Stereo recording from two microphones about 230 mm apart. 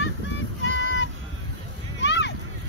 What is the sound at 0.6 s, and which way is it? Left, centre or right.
Child singing, left.